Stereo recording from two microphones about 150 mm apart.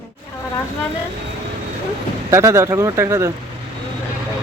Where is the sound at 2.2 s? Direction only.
20° right (ahead or behind).